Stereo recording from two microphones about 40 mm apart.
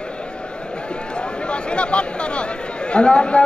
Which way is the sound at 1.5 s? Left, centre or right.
Left.